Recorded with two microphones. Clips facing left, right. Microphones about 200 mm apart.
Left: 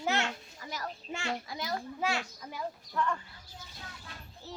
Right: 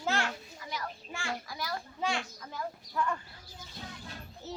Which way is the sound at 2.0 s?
5° left (ahead or behind).